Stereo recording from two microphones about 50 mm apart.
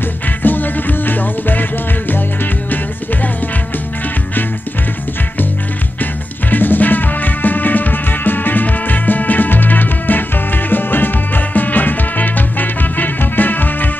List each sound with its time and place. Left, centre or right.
0.4 s music: left
6.5 s music: left